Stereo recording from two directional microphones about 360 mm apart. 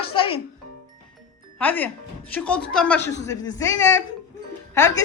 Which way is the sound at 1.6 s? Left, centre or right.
Centre.